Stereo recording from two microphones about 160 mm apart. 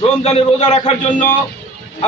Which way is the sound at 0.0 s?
40° left (ahead or behind).